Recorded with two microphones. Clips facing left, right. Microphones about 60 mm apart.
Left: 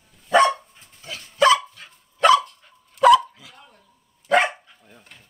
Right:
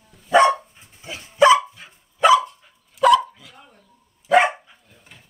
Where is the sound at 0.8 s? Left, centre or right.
Centre.